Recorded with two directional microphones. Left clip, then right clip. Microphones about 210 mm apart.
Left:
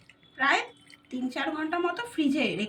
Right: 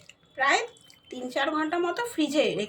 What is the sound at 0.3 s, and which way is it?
A woman's voice, 55° right (ahead or behind).